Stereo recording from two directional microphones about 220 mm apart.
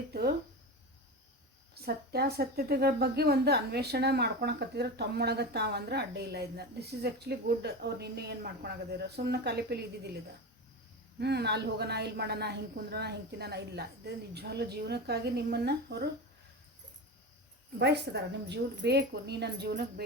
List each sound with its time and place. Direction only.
0.1 s speech: 45° right (ahead or behind)
1.7 s a woman's voice: 45° right (ahead or behind)
11.2 s a woman's voice: 50° right (ahead or behind)
17.7 s a woman's voice: 50° right (ahead or behind)